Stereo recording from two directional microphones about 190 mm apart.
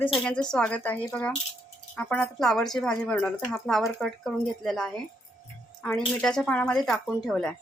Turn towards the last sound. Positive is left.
turn(degrees=5)  # may be behind; listen again after turning